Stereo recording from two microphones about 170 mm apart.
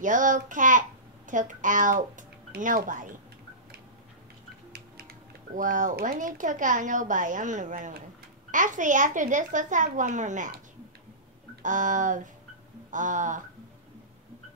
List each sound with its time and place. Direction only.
0.0 s a child's voice: 50° right (ahead or behind)
5.6 s speech: 50° right (ahead or behind)
11.6 s speech: 50° right (ahead or behind)